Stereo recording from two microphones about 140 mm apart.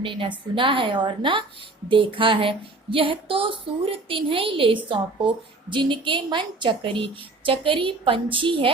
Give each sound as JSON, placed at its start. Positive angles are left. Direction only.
{"t": 0.0, "sound": "a woman's voice", "side_deg": -35}